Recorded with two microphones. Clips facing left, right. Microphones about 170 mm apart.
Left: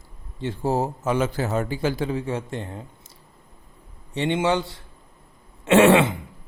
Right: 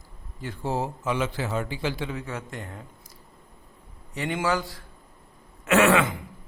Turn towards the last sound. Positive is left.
turn(degrees=30)  # may be behind; listen again after turning